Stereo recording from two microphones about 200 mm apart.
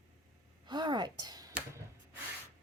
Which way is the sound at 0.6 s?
20° right (ahead or behind).